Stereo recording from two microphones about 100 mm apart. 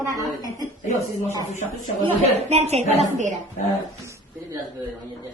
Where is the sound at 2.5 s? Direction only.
90° right.